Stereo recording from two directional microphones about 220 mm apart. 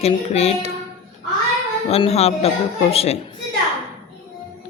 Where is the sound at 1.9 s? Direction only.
30° left (ahead or behind).